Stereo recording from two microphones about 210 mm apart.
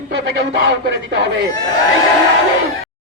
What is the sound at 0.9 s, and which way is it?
Speech, 55° right (ahead or behind).